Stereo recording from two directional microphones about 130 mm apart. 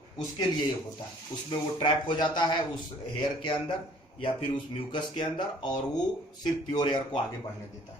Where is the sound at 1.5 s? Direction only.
35° left (ahead or behind).